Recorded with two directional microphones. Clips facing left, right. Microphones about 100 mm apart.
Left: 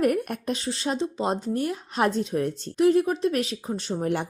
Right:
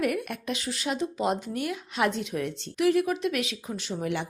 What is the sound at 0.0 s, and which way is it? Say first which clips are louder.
A woman's voice: left 5 dB; 40° left (ahead or behind).